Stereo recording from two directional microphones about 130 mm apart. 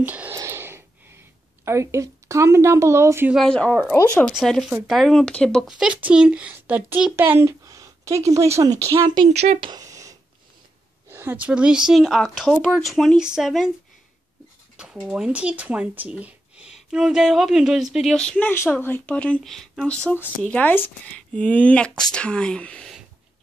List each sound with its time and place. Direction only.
0.0 s a sound: 10° right (ahead or behind)
3.3 s speech: 5° left (ahead or behind)
3.9 s speech: 20° left (ahead or behind)
4.4 s speech: centre (ahead or behind); by 9.3 s 35° right (ahead or behind)
9.3 s speech: 55° right (ahead or behind)
9.6 s a sound: 30° right (ahead or behind)
11.1 s speech: 15° right (ahead or behind)
15.0 s speech: 5° right (ahead or behind)
18.5 s speech: 15° left (ahead or behind)